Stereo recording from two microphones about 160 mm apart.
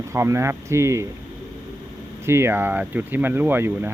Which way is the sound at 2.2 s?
15° right (ahead or behind).